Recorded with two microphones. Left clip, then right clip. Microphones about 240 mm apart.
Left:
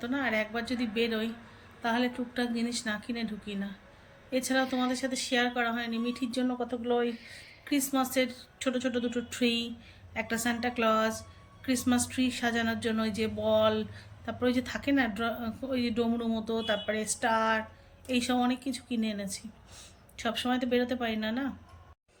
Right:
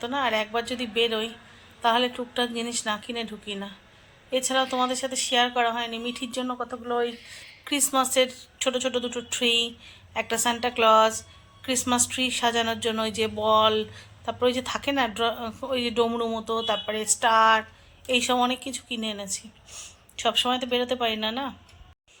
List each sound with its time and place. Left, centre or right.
0.0 s a woman's voice: centre
6.6 s speech: right
7.6 s a woman's voice: centre